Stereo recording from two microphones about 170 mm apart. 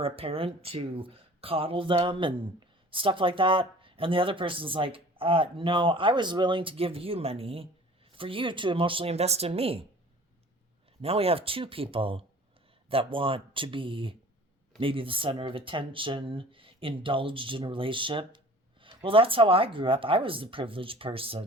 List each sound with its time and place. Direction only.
0.0 s speech: 35° right (ahead or behind)
11.0 s speech: 35° right (ahead or behind)